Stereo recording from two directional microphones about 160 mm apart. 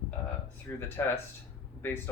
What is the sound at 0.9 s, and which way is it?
Speech, 15° left (ahead or behind).